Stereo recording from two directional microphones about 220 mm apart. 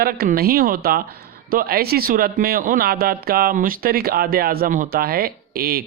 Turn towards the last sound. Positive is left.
turn(degrees=-45)  # may be behind; listen again after turning